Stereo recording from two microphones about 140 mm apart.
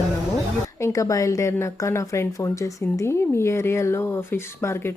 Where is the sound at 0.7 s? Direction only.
20° left (ahead or behind).